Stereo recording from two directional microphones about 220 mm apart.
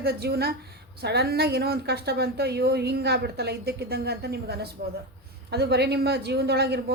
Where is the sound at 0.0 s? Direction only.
45° right (ahead or behind).